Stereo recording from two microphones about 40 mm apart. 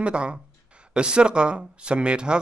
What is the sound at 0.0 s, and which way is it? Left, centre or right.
Speech, right.